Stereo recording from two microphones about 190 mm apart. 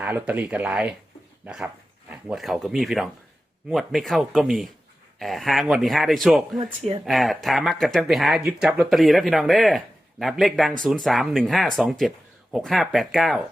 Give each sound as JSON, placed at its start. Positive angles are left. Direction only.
{"t": 0.0, "sound": "speech", "side_deg": -10}
{"t": 6.6, "sound": "speech", "side_deg": -30}
{"t": 7.0, "sound": "speech", "side_deg": 0}